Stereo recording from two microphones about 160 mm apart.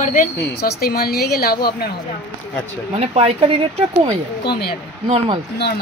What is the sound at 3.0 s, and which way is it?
Speech, 40° right (ahead or behind).